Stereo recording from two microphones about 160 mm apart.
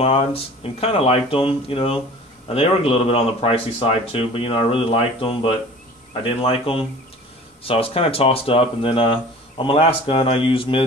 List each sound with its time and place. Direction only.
0.0 s speech: 35° left (ahead or behind)